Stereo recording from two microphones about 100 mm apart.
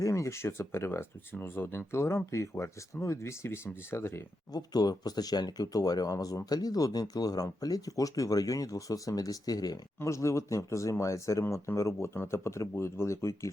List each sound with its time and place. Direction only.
0.0 s speech: 30° left (ahead or behind)
4.5 s speech: 40° left (ahead or behind)